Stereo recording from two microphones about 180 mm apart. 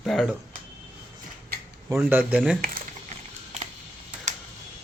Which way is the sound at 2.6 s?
50° right (ahead or behind).